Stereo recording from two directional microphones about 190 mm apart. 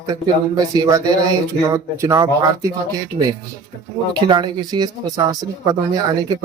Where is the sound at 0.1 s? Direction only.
20° right (ahead or behind).